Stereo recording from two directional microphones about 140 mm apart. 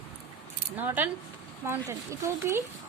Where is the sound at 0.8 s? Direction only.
15° right (ahead or behind).